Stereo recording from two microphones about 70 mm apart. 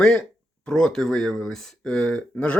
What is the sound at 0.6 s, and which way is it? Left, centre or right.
Speech, centre.